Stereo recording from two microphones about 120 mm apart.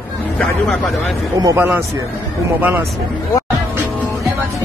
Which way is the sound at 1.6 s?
15° right (ahead or behind).